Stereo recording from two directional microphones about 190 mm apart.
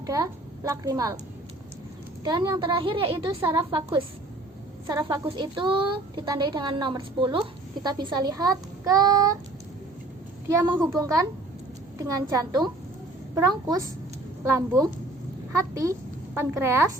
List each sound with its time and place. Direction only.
0.0 s a woman's voice: 15° right (ahead or behind)
2.2 s a woman's voice: 20° right (ahead or behind)
10.5 s a child's voice: 10° right (ahead or behind)